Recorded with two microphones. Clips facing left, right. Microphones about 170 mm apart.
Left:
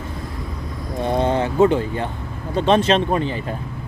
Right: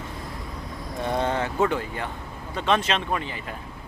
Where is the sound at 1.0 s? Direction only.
20° left (ahead or behind).